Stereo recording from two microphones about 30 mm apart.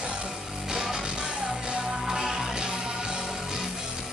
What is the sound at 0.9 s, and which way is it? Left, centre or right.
Music, right.